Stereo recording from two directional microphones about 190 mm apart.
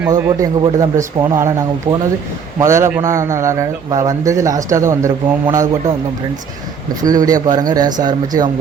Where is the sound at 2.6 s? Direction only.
15° right (ahead or behind).